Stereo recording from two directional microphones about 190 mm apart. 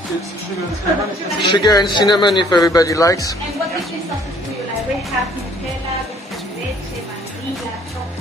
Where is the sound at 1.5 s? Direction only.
20° left (ahead or behind).